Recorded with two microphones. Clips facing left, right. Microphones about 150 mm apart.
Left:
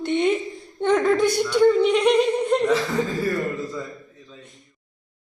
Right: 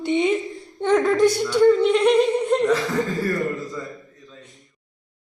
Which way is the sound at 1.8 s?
Centre (ahead or behind).